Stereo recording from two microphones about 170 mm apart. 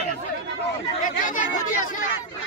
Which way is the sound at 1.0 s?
50° left (ahead or behind).